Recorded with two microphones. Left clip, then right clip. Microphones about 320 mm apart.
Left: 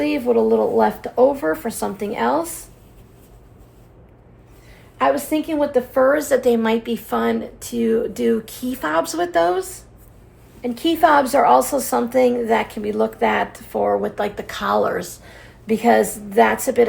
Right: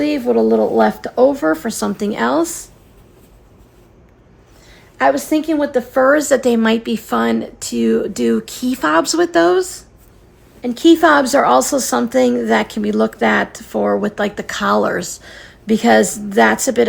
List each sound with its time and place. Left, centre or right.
0.0 s a woman's voice: right
4.9 s a woman's voice: right